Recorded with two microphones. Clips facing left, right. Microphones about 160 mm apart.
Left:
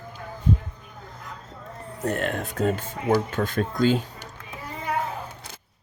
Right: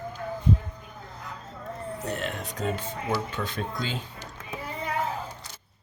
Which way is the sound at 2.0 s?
50° left (ahead or behind).